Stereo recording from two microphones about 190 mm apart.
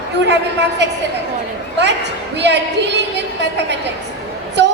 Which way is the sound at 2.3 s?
65° right (ahead or behind).